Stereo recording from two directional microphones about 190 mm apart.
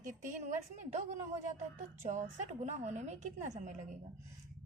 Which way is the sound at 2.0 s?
40° right (ahead or behind).